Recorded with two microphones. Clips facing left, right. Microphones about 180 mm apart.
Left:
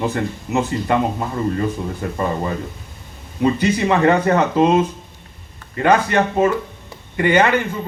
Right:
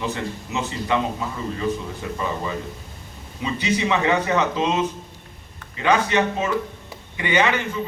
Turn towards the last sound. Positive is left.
turn(degrees=55)  # may be behind; listen again after turning